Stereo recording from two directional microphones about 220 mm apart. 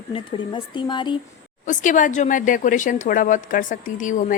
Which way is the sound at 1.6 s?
35° left (ahead or behind).